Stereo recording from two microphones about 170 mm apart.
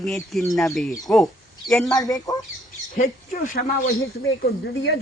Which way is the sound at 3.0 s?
50° left (ahead or behind).